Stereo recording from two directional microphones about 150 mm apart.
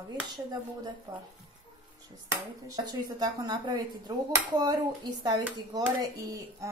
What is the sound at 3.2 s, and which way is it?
Speech, 25° right (ahead or behind).